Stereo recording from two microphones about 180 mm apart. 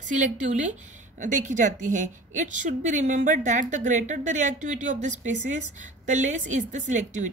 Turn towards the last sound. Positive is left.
turn(degrees=-45)  # may be behind; listen again after turning